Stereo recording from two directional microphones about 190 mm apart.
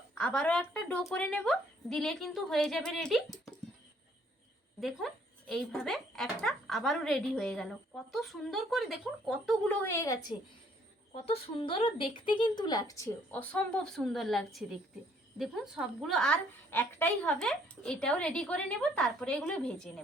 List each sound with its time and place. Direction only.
0.1 s speech: 5° left (ahead or behind)
4.8 s speech: centre (ahead or behind)
9.8 s a woman's voice: 15° left (ahead or behind)
11.1 s speech: 30° left (ahead or behind); by 19.9 s 5° left (ahead or behind)